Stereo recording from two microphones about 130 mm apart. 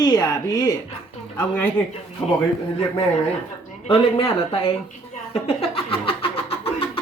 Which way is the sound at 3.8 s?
45° left (ahead or behind).